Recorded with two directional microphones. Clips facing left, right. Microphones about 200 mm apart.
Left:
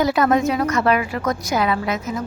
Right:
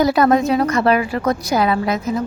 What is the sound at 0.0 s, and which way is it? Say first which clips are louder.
A woman's voice: right 3 dB; 35° right (ahead or behind).